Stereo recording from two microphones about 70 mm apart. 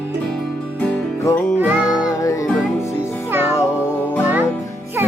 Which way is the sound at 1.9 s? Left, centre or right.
Left.